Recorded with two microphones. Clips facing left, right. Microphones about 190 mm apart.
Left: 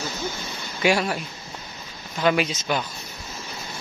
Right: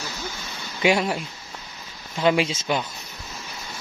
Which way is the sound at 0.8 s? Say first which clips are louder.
Right 1 dB; 25° right (ahead or behind).